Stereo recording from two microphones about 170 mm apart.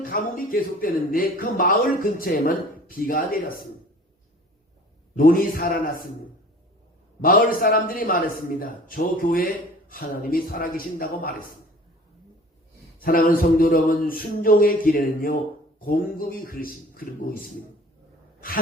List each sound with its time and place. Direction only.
0.0 s speech: 55° left (ahead or behind)
5.1 s speech: 55° left (ahead or behind)
7.2 s speech: 55° left (ahead or behind)
13.0 s speech: 55° left (ahead or behind)